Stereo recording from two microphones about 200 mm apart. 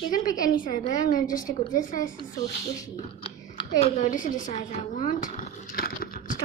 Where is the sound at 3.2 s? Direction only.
25° left (ahead or behind); by 6.4 s 45° left (ahead or behind).